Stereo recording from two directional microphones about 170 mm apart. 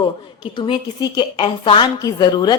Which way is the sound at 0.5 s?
25° left (ahead or behind).